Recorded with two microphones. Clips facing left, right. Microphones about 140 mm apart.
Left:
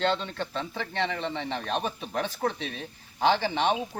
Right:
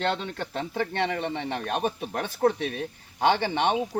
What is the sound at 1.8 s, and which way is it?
Speech, 50° right (ahead or behind).